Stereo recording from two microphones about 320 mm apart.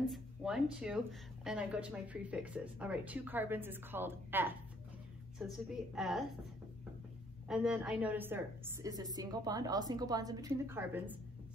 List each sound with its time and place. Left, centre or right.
0.1 s speech: centre
7.4 s a woman's voice: centre